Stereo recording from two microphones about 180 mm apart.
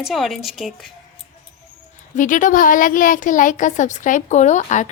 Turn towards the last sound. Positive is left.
turn(degrees=40)  # may be behind; listen again after turning